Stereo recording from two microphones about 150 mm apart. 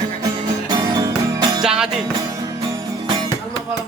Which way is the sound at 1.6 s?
5° right (ahead or behind).